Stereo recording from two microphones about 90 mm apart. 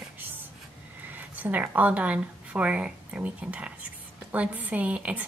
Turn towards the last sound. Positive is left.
turn(degrees=-15)  # may be behind; listen again after turning